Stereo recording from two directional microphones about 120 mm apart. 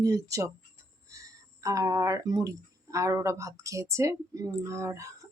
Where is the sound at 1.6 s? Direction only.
30° right (ahead or behind).